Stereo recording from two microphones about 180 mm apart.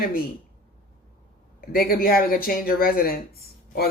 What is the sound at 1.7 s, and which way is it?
Speech, 55° left (ahead or behind).